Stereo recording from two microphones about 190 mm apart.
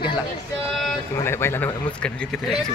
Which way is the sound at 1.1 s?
15° left (ahead or behind).